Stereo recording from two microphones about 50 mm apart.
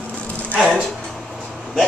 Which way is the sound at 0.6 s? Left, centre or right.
Centre.